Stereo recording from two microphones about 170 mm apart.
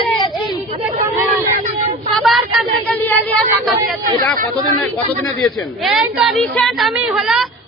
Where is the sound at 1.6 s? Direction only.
45° right (ahead or behind).